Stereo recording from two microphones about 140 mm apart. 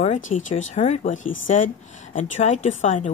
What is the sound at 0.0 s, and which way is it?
Speech, 60° left (ahead or behind).